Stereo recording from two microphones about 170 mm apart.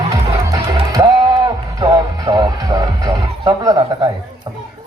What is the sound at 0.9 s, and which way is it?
Music, 25° right (ahead or behind).